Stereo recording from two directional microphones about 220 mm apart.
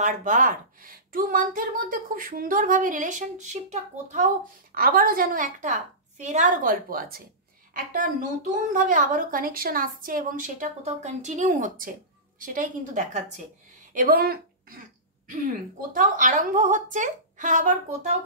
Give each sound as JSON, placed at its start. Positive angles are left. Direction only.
{"t": 0.0, "sound": "a woman's voice", "side_deg": -35}